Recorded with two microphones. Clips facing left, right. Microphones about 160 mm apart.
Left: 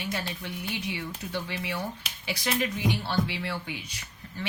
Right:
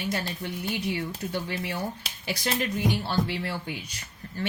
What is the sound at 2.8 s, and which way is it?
Speech, 45° right (ahead or behind).